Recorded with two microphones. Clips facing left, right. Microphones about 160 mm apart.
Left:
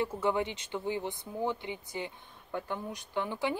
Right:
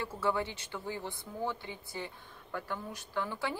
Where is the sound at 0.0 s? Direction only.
20° left (ahead or behind).